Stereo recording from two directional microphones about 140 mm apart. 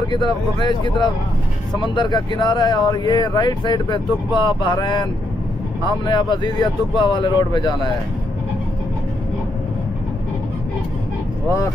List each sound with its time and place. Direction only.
0.6 s speech: 30° left (ahead or behind)